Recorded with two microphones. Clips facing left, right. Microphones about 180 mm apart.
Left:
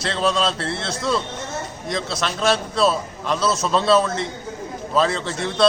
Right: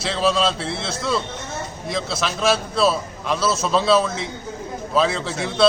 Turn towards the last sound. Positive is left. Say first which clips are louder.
# right 1 dB
turn(degrees=0)  # may be behind; listen again after turning